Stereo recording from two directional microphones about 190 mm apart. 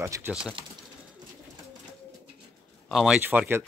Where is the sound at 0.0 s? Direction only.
10° right (ahead or behind).